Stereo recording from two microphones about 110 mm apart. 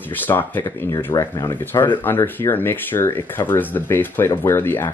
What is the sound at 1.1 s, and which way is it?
Speech, 35° left (ahead or behind).